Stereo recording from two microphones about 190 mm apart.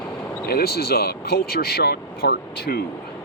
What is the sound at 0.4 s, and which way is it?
Speech, 55° left (ahead or behind).